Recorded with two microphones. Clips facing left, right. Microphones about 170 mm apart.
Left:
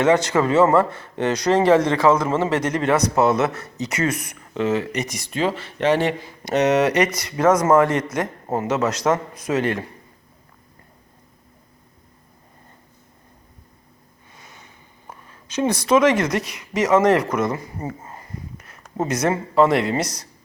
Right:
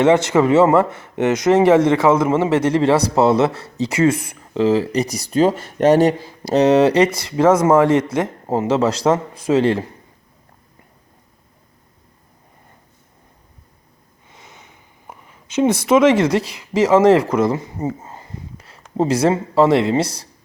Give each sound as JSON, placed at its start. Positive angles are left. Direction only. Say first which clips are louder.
{"t": 0.0, "sound": "speech", "louder": "right 4 dB", "side_deg": -25}
{"t": 14.3, "sound": "speech", "louder": "right 2 dB", "side_deg": -20}